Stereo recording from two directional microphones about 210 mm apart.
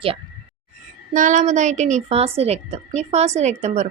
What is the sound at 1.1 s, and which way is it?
A woman's voice, 35° right (ahead or behind).